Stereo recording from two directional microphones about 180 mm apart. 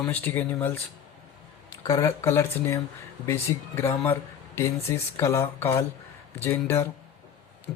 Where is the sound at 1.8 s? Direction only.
20° left (ahead or behind).